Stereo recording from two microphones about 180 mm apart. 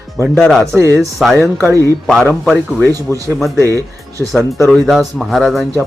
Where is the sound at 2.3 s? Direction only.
10° right (ahead or behind).